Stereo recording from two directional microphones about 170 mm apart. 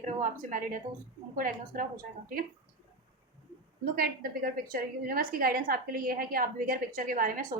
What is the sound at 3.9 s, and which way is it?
A woman's voice, 60° right (ahead or behind).